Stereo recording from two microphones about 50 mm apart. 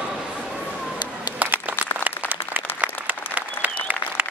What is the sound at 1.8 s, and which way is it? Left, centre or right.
Applause, right.